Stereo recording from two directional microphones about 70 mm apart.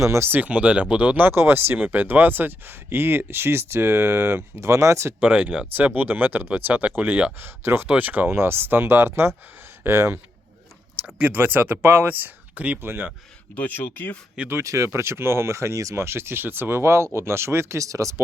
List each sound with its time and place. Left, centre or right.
0.0 s speech: right
0.3 s speech: right
1.3 s speech: right
5.2 s speech: right
7.9 s speech: right
11.2 s speech: right
13.6 s speech: left
14.5 s speech: right